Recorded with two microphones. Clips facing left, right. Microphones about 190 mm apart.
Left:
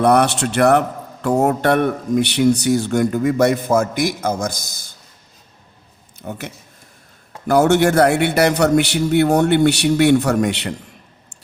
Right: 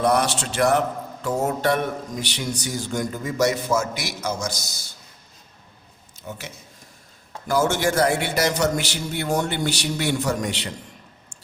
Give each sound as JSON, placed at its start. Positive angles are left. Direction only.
{"t": 0.0, "sound": "a man's voice", "side_deg": 60}
{"t": 6.2, "sound": "a man's voice", "side_deg": 60}